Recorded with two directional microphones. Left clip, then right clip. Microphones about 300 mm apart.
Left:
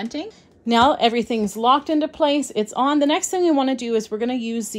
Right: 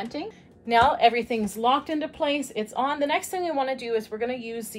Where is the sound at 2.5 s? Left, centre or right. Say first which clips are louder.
Left 7 dB; left.